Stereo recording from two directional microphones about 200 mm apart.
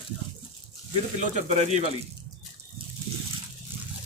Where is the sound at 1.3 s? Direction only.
35° right (ahead or behind).